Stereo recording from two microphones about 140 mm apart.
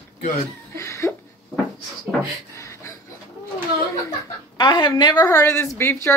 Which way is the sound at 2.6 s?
20° left (ahead or behind).